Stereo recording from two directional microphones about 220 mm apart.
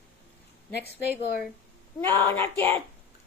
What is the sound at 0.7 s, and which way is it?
Speech, 45° left (ahead or behind).